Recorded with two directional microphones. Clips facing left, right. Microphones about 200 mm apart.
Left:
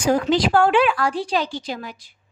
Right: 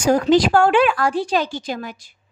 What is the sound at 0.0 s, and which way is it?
A woman's voice, 45° right (ahead or behind).